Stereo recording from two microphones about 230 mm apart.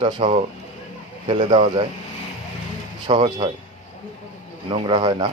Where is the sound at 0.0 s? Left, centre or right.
Centre.